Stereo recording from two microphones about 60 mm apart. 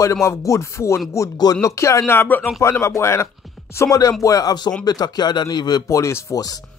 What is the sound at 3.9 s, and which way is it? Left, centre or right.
Speech, left.